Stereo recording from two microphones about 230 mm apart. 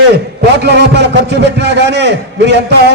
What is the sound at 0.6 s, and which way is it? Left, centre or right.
A man's voice, right.